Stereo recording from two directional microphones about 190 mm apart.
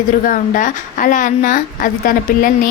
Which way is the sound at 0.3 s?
45° left (ahead or behind).